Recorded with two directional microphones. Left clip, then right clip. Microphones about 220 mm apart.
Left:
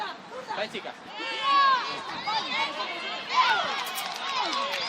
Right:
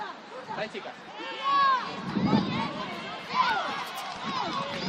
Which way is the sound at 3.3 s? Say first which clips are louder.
Left 3 dB; 25° left (ahead or behind).